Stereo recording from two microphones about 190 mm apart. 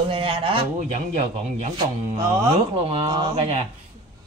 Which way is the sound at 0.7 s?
40° right (ahead or behind).